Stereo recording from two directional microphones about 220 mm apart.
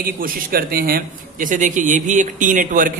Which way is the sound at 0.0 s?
40° right (ahead or behind).